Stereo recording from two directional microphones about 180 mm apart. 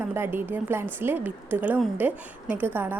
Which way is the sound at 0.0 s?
10° right (ahead or behind).